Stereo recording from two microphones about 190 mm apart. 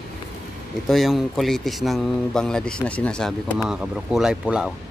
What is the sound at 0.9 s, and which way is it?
Speech, centre (ahead or behind).